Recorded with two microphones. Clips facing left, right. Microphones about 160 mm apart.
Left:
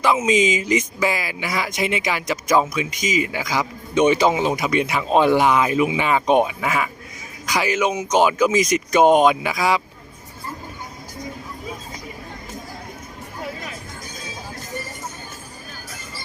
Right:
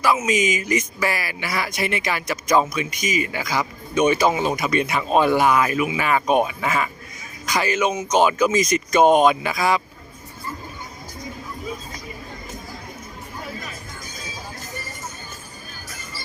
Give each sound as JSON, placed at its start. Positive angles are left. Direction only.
{"t": 0.0, "sound": "speech", "side_deg": 20}